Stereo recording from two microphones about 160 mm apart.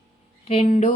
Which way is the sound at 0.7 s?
45° left (ahead or behind).